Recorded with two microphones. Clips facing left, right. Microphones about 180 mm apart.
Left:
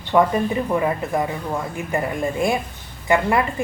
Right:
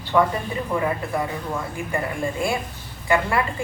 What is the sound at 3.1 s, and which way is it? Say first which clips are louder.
Speech: left 3 dB; 20° left (ahead or behind).